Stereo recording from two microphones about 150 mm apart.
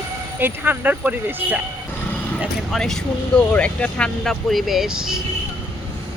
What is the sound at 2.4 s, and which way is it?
Speech, centre (ahead or behind).